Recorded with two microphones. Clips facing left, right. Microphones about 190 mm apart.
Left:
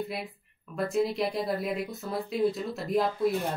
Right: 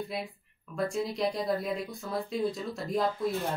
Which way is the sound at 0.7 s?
5° left (ahead or behind).